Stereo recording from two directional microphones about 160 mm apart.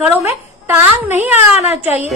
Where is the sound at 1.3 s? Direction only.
45° left (ahead or behind).